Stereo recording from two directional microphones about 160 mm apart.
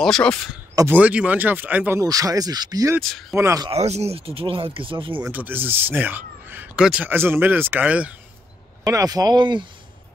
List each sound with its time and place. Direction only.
0.0 s speech: 5° left (ahead or behind)
0.7 s speech: 10° right (ahead or behind)
3.0 s speech: centre (ahead or behind)
3.3 s speech: 15° right (ahead or behind)
3.7 s speech: 40° right (ahead or behind)
5.2 s speech: 10° right (ahead or behind)
8.8 s speech: 20° right (ahead or behind)